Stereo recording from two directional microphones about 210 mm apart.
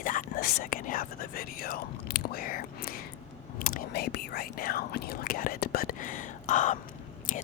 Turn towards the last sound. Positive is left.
turn(degrees=35)  # may be behind; listen again after turning